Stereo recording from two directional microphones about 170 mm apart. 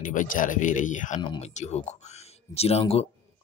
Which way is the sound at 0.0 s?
50° left (ahead or behind).